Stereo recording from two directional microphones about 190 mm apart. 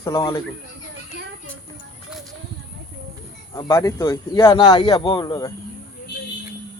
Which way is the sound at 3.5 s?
15° left (ahead or behind).